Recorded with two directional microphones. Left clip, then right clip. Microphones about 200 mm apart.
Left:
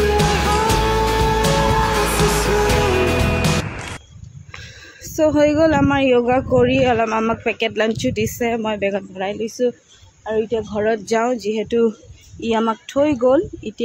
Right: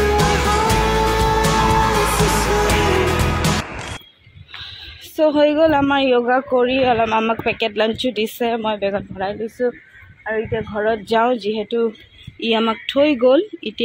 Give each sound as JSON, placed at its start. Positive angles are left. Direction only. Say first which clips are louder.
{"t": 0.0, "sound": "music", "louder": "right 1 dB", "side_deg": 0}
{"t": 5.1, "sound": "speech", "louder": "even", "side_deg": 15}
{"t": 11.4, "sound": "speech", "louder": "left 2 dB", "side_deg": 10}